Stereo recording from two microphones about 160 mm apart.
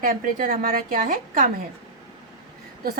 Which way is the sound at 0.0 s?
60° right (ahead or behind).